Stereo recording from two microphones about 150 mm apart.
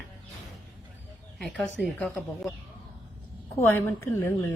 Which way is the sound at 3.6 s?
15° left (ahead or behind).